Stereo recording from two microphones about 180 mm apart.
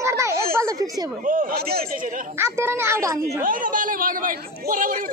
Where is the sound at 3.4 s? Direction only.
50° right (ahead or behind).